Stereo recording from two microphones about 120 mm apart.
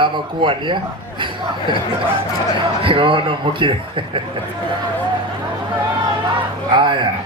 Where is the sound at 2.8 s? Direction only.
45° right (ahead or behind).